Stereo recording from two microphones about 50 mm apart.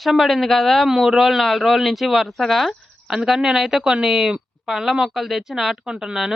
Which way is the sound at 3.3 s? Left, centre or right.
Centre.